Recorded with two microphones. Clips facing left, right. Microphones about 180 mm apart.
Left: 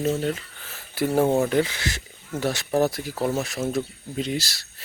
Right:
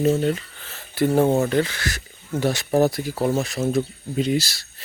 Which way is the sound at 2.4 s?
Centre (ahead or behind).